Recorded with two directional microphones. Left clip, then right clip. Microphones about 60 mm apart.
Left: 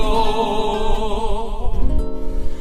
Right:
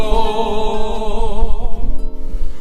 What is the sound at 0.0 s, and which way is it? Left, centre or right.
Music, centre.